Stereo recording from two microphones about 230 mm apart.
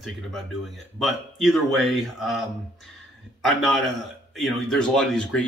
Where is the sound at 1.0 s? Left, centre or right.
Centre.